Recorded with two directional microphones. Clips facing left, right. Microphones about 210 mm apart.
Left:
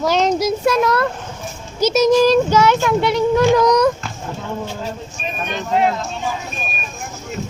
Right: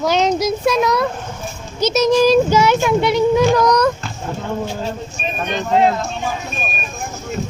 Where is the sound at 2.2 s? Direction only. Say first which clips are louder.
Right 1 dB; 5° right (ahead or behind).